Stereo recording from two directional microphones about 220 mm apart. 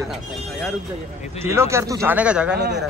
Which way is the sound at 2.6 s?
50° right (ahead or behind).